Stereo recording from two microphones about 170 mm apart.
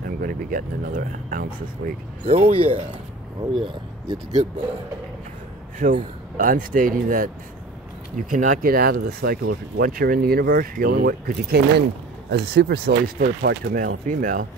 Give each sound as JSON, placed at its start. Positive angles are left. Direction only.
{"t": 0.0, "sound": "speech", "side_deg": -55}
{"t": 2.2, "sound": "speech", "side_deg": -35}
{"t": 5.8, "sound": "speech", "side_deg": -55}
{"t": 8.3, "sound": "speech", "side_deg": -50}
{"t": 12.3, "sound": "speech", "side_deg": -85}